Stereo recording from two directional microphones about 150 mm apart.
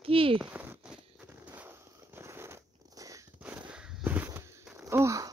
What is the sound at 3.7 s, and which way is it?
Walk, 5° right (ahead or behind).